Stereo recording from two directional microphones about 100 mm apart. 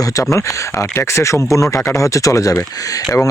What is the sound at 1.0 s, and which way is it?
Speech, 30° left (ahead or behind).